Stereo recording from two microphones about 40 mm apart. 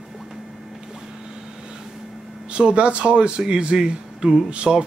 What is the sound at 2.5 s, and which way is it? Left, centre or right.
Speech, right.